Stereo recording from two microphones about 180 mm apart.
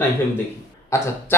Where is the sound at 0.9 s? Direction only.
15° left (ahead or behind).